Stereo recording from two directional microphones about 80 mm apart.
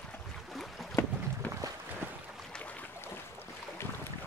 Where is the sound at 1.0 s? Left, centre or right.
Left.